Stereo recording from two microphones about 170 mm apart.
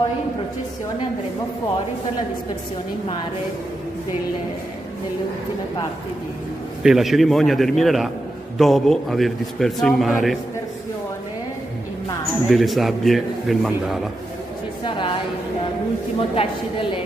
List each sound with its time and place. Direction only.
6.8 s a man's voice: centre (ahead or behind)
12.4 s a man's voice: centre (ahead or behind)
14.8 s a sound: 30° left (ahead or behind)
16.2 s a woman's voice: 30° left (ahead or behind)